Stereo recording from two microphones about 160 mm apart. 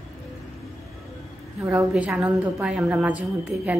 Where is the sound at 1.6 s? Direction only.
20° right (ahead or behind).